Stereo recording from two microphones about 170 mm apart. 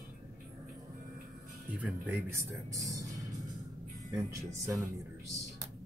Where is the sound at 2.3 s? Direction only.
15° right (ahead or behind).